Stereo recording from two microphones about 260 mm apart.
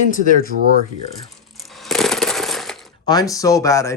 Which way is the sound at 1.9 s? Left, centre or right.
Centre.